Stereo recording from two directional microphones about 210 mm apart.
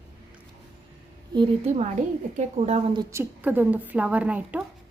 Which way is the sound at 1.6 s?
35° right (ahead or behind).